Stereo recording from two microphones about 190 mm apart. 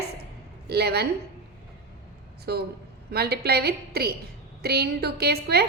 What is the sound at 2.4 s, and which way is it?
A woman's voice, 55° right (ahead or behind).